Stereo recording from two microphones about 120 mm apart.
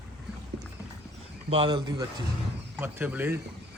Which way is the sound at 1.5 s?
45° right (ahead or behind).